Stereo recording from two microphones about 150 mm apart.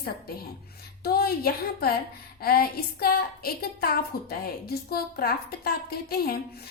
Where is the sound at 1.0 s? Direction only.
90° left.